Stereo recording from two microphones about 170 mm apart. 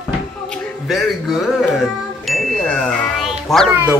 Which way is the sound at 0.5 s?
Centre (ahead or behind).